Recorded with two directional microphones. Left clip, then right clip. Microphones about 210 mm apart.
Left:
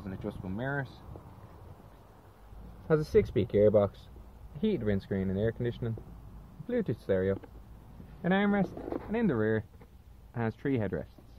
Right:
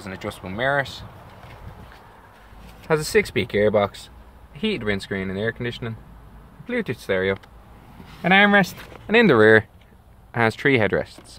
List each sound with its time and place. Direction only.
0.0 s speech: 5° right (ahead or behind)
2.9 s speech: 5° left (ahead or behind)
8.2 s speech: 10° right (ahead or behind)
9.1 s speech: 35° right (ahead or behind)
10.3 s speech: 25° right (ahead or behind)